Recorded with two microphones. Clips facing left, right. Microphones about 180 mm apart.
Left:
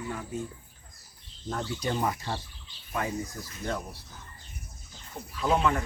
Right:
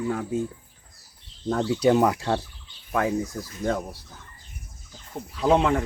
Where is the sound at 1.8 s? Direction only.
75° right (ahead or behind).